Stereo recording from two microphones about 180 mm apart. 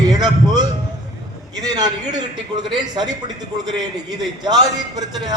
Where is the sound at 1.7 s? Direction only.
25° right (ahead or behind).